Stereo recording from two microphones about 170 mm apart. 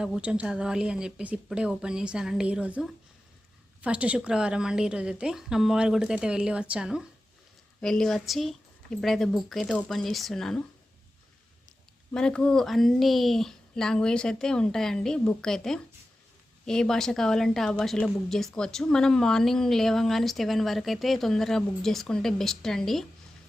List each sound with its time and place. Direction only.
0.0 s a woman's voice: 5° right (ahead or behind)
12.1 s a woman's voice: 5° left (ahead or behind)